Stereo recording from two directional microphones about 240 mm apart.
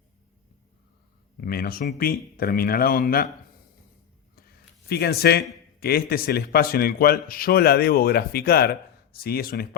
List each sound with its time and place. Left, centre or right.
1.4 s speech: left
4.9 s speech: left